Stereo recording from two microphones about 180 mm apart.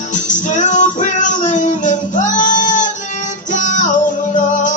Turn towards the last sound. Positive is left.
turn(degrees=45)  # may be behind; listen again after turning